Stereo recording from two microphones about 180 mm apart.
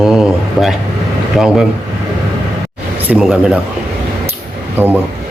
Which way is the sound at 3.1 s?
5° right (ahead or behind).